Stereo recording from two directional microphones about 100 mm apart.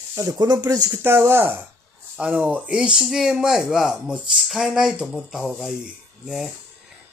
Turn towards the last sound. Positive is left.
turn(degrees=-5)  # may be behind; listen again after turning